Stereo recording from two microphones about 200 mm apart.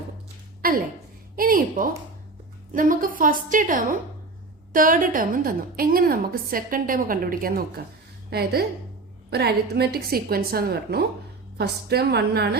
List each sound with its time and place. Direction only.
0.6 s a woman's voice: 45° right (ahead or behind)